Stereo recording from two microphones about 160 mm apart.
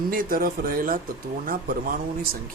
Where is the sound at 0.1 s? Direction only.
60° right (ahead or behind).